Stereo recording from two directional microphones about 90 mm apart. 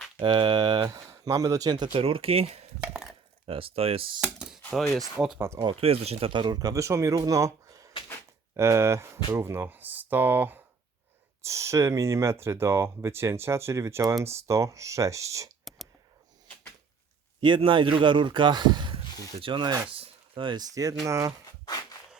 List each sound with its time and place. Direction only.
0.2 s speech: 70° right (ahead or behind)
0.9 s speech: 40° right (ahead or behind)
1.9 s speech: 90° right
2.9 s a sound: centre (ahead or behind)
3.4 s speech: 90° right
4.2 s chopping: 5° right (ahead or behind)
4.7 s speech: centre (ahead or behind)
5.7 s speech: 90° right; by 6.6 s 60° right (ahead or behind)
6.6 s speech: 40° right (ahead or behind); by 10.6 s 20° right (ahead or behind)
11.4 s speech: 35° right (ahead or behind)
15.7 s a sound: centre (ahead or behind)
17.4 s speech: 65° right (ahead or behind)
19.9 s a sound: 80° right; by 20.7 s 60° right (ahead or behind)
20.7 s speech: 40° right (ahead or behind)